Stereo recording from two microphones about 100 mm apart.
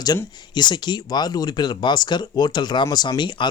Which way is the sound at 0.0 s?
45° left (ahead or behind).